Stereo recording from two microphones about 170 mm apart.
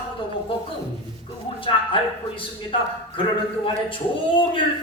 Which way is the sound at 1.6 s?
30° left (ahead or behind).